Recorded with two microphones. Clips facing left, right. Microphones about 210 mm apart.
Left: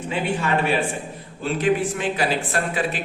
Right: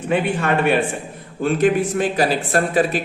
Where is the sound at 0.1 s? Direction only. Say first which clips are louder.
Right 4 dB; 60° right (ahead or behind).